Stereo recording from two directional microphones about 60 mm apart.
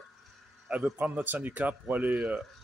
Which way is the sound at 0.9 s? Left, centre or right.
Right.